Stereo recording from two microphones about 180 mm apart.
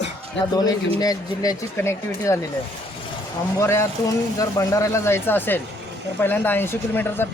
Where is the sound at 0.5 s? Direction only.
20° left (ahead or behind).